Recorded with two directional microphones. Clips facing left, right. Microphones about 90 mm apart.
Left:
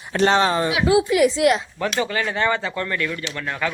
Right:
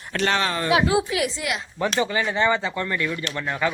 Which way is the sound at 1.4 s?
90° left.